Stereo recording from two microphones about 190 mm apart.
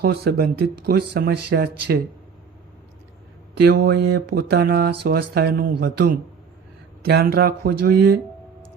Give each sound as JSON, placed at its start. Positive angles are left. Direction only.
{"t": 0.0, "sound": "speech", "side_deg": -60}
{"t": 3.6, "sound": "speech", "side_deg": -55}